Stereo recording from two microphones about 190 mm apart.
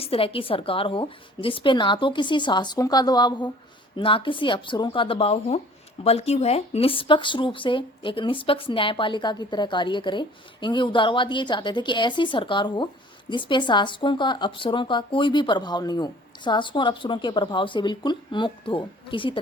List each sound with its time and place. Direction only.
0.0 s speech: 30° left (ahead or behind)